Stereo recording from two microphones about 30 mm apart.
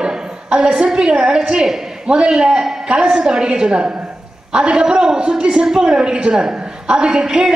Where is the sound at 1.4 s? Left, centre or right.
Right.